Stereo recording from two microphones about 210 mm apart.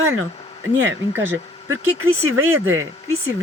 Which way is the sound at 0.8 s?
65° right (ahead or behind).